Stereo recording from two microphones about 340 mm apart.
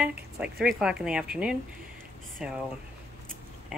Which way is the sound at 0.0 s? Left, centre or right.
Centre.